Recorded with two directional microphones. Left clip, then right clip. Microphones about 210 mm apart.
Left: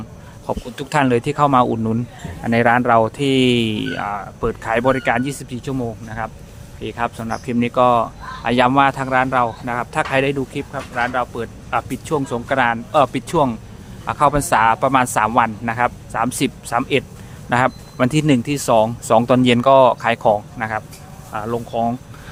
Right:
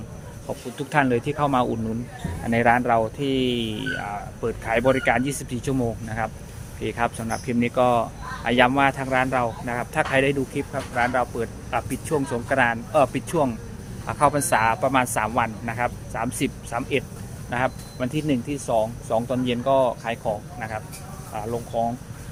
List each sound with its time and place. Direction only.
0.4 s speech: 30° left (ahead or behind)